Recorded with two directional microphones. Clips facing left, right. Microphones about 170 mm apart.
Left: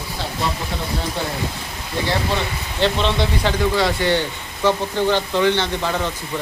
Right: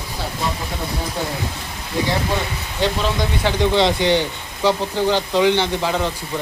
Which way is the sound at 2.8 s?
10° right (ahead or behind).